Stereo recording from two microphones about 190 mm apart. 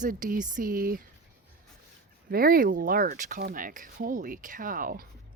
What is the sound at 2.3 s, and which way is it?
Speech, 50° right (ahead or behind).